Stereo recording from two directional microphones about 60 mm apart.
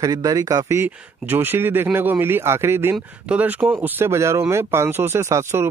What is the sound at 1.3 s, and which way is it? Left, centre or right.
Speech, right.